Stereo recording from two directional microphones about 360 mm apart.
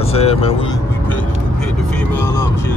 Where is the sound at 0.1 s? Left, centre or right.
Centre.